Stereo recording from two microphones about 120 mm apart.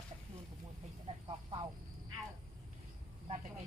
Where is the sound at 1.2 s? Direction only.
50° right (ahead or behind).